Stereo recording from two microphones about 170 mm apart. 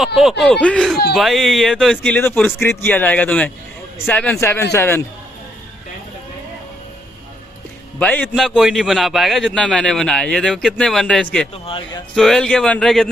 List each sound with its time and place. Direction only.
0.0 s a man's voice: centre (ahead or behind); by 5.0 s 15° left (ahead or behind)
8.0 s a man's voice: 10° left (ahead or behind)
11.6 s speech: 30° left (ahead or behind)
12.2 s a man's voice: 5° left (ahead or behind)